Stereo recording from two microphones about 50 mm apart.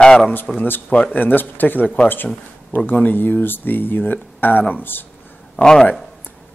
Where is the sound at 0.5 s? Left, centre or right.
Left.